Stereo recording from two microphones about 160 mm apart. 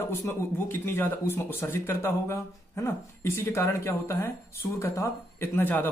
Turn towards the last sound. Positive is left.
turn(degrees=10)  # may be behind; listen again after turning